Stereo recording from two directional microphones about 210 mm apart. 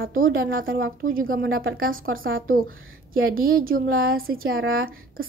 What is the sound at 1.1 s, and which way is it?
A woman's voice, 45° right (ahead or behind).